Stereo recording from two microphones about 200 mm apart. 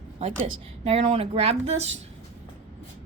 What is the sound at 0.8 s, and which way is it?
A woman's voice, 30° right (ahead or behind).